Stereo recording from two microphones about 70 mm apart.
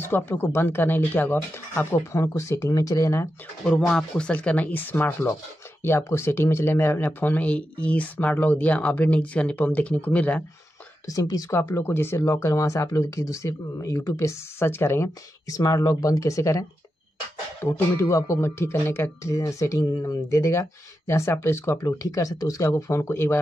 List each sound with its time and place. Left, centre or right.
0.0 s speech: left
2.7 s speech: left
3.6 s speech: centre
11.1 s speech: left
11.5 s speech: left
15.4 s speech: left
17.6 s speech: left
18.1 s speech: left
19.8 s speech: left
20.2 s speech: left
21.7 s speech: left